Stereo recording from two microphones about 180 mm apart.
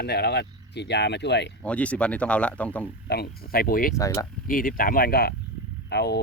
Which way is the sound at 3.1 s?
60° left (ahead or behind).